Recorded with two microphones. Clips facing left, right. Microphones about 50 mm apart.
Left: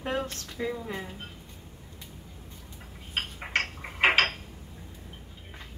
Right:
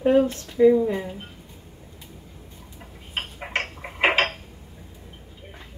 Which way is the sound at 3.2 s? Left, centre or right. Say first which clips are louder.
Right 2 dB; centre.